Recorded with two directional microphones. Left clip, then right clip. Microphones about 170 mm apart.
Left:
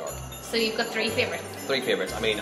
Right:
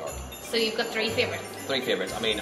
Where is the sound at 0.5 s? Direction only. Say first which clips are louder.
Even; 10° right (ahead or behind).